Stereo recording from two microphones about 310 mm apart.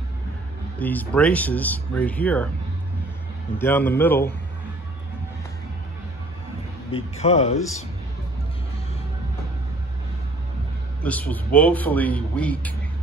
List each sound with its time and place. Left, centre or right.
0.7 s a man's voice: centre
3.5 s a man's voice: centre
6.9 s speech: centre
11.0 s a man's voice: centre